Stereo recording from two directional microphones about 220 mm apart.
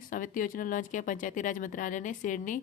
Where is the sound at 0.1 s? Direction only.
40° left (ahead or behind).